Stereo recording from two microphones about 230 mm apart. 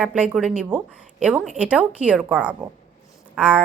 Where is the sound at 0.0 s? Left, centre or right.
Centre.